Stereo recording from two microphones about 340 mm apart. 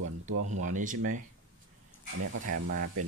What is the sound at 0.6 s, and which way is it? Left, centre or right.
Cutlery, right.